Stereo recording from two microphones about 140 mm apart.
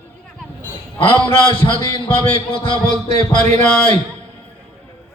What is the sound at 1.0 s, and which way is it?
A man's voice, 40° left (ahead or behind).